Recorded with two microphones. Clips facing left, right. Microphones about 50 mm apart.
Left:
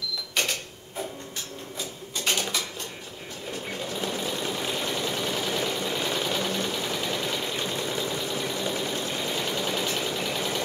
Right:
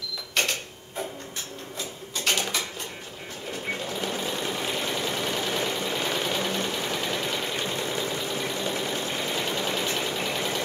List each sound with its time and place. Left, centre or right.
2.3 s a sound: right
3.6 s sewing machine: centre
9.8 s vehicle: centre